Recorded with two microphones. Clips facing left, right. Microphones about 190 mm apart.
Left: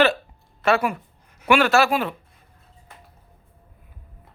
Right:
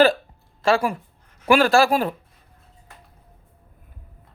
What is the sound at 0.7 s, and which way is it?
Speech, 30° right (ahead or behind).